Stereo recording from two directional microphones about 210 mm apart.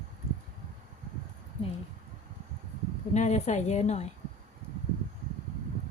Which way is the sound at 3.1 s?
35° left (ahead or behind).